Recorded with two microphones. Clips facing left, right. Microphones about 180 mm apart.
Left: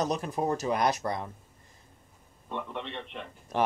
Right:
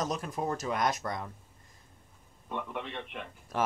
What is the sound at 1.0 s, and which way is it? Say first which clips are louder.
Speech: left 4 dB; 25° left (ahead or behind).